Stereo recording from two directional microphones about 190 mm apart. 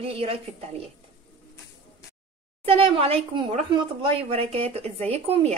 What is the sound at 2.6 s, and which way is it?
Speech, 30° right (ahead or behind).